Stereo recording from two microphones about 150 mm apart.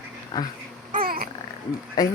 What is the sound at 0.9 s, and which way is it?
Babbling, 70° right (ahead or behind).